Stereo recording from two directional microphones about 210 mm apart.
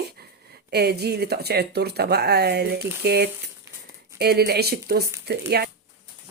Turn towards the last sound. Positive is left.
turn(degrees=-50)  # may be behind; listen again after turning